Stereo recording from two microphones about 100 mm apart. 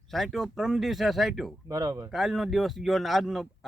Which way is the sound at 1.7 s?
35° right (ahead or behind).